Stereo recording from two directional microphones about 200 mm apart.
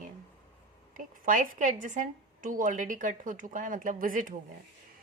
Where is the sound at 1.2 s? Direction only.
40° right (ahead or behind).